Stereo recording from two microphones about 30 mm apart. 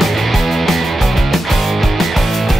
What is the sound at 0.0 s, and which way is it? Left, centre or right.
Music, centre.